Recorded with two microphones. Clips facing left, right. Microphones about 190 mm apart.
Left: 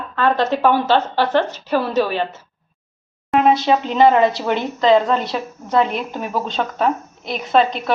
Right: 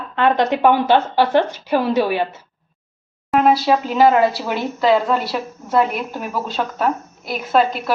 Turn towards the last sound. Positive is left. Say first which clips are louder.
# left 1 dB
turn(degrees=-5)  # may be behind; listen again after turning